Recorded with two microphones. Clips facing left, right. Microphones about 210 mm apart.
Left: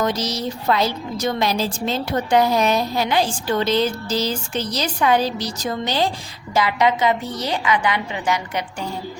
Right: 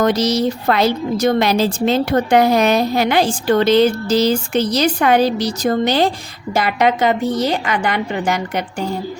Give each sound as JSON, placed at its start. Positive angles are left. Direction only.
{"t": 0.0, "sound": "a woman's voice", "side_deg": -70}